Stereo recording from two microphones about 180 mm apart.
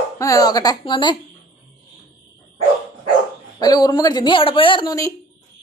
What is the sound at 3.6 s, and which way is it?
Speech, 20° left (ahead or behind).